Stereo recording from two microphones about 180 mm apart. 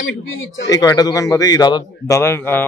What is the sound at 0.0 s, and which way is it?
Speech, 90° left.